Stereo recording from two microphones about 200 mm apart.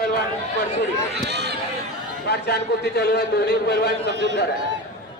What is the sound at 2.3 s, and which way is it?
A man's voice, 55° left (ahead or behind).